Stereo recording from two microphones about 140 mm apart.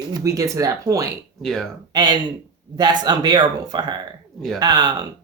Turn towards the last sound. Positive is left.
turn(degrees=-30)  # may be behind; listen again after turning